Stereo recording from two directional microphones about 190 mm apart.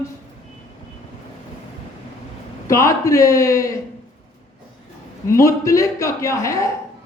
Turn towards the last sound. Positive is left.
turn(degrees=15)  # may be behind; listen again after turning